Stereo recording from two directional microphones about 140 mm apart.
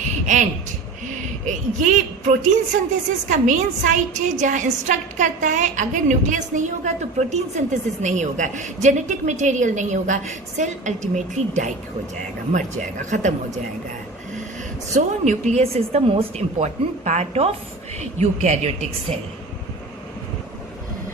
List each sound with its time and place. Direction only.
0.0 s a sound: 65° right (ahead or behind)
1.5 s a woman's voice: 60° right (ahead or behind)
14.9 s a woman's voice: 60° right (ahead or behind)